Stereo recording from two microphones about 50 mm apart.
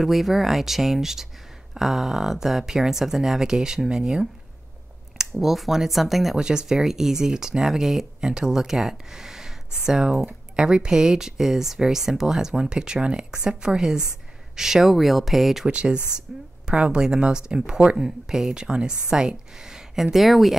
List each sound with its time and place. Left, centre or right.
0.0 s speech: centre
5.3 s speech: centre
6.3 s speech: centre
15.6 s speech: centre